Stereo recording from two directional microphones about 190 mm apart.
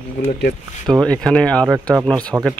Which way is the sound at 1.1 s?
5° left (ahead or behind).